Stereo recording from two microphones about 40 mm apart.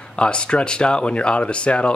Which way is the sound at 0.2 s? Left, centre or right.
Left.